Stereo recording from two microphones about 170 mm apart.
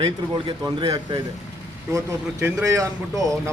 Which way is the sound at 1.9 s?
15° right (ahead or behind).